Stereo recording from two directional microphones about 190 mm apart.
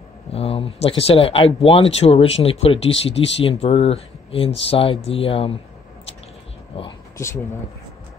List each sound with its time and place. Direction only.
0.3 s speech: 30° left (ahead or behind)
6.7 s speech: 30° left (ahead or behind)
7.2 s speech: 15° left (ahead or behind)